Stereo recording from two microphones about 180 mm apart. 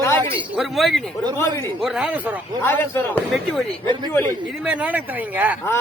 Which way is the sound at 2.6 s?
15° left (ahead or behind).